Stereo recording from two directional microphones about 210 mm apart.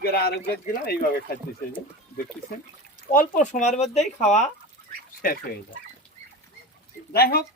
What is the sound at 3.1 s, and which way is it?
Speech, 40° left (ahead or behind).